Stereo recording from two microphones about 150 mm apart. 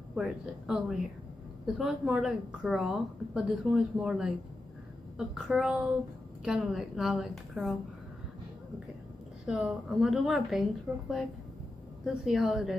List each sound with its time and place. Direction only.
0.1 s a woman's voice: 5° right (ahead or behind)
9.5 s a woman's voice: 5° right (ahead or behind)